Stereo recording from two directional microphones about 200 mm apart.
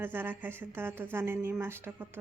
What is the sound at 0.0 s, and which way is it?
A woman's voice, 10° right (ahead or behind).